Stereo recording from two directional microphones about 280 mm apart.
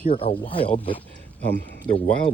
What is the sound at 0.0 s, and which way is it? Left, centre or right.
Speech, left.